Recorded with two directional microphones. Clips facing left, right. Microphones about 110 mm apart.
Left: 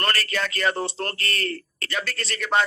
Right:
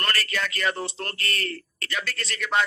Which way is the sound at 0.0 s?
35° left (ahead or behind).